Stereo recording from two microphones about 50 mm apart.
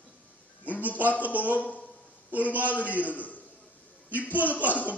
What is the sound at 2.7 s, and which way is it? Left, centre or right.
Speech, left.